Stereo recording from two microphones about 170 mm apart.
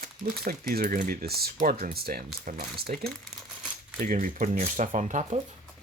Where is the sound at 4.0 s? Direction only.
55° right (ahead or behind).